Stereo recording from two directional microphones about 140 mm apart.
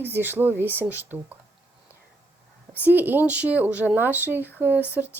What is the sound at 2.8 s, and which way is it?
Speech, 15° right (ahead or behind).